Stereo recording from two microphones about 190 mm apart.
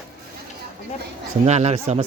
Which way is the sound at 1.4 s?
35° right (ahead or behind).